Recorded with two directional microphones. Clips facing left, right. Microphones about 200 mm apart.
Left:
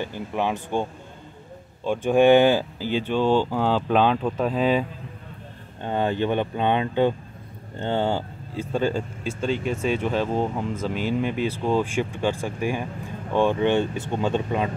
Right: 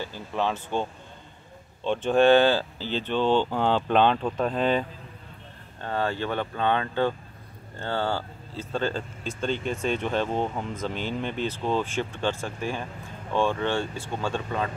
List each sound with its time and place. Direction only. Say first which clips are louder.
0.0 s speech: left 2 dB; 15° left (ahead or behind)
1.9 s speech: left 3 dB; 10° left (ahead or behind)
5.8 s speech: left 4 dB; 20° left (ahead or behind)